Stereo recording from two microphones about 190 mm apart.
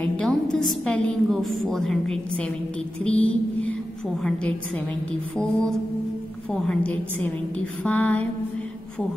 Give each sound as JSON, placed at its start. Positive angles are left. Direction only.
{"t": 0.0, "sound": "a woman's voice", "side_deg": 5}
{"t": 5.4, "sound": "a woman's voice", "side_deg": 0}